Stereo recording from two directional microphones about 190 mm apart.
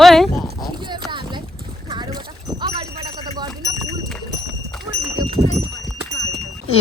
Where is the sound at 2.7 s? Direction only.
25° right (ahead or behind).